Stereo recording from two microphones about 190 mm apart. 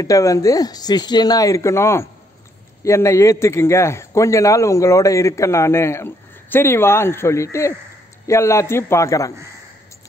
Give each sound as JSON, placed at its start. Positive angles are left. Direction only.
{"t": 0.0, "sound": "a man's voice", "side_deg": 15}